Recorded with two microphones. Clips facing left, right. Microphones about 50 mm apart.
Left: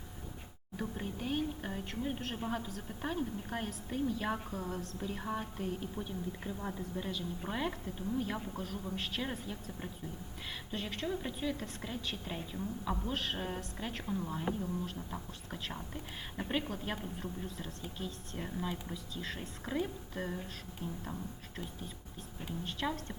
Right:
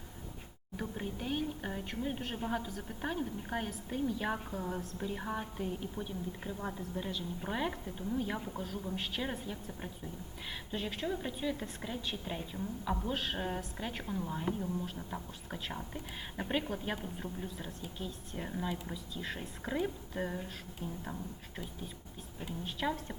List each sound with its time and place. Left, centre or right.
0.8 s a woman's voice: centre
10.7 s a woman's voice: centre
17.4 s a woman's voice: centre
18.3 s a woman's voice: centre
20.8 s speech: right
22.4 s a woman's voice: centre